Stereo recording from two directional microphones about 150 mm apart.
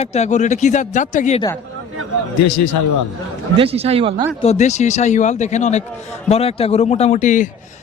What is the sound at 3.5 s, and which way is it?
Speech, 40° right (ahead or behind).